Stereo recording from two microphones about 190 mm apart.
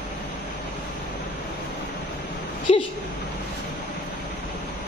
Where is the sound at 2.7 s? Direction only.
30° left (ahead or behind).